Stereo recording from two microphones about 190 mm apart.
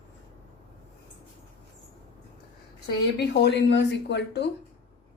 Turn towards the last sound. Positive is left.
turn(degrees=65)  # may be behind; listen again after turning